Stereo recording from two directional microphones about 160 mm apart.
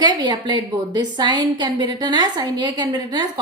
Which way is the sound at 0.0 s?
25° right (ahead or behind).